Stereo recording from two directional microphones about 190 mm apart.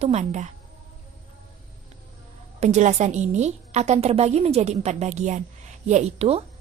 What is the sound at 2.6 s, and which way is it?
A woman's voice, 35° right (ahead or behind).